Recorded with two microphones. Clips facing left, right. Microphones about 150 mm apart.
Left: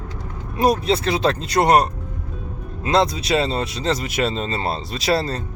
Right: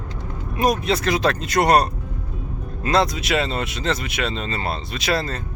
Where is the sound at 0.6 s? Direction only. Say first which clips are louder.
Left 2 dB; 30° left (ahead or behind).